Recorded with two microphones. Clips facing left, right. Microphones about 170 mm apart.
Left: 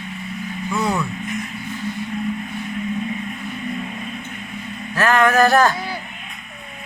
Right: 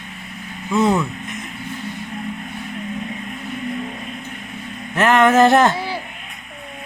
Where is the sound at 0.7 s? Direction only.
20° right (ahead or behind).